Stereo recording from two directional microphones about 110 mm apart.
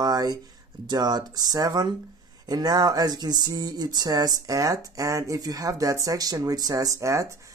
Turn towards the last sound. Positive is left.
turn(degrees=-30)  # may be behind; listen again after turning